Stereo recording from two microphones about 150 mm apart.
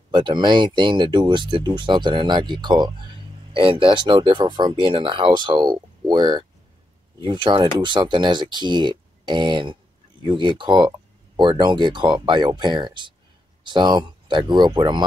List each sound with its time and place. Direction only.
0.1 s speech: 30° right (ahead or behind)